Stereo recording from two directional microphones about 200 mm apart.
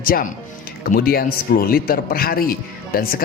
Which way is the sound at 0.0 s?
45° left (ahead or behind).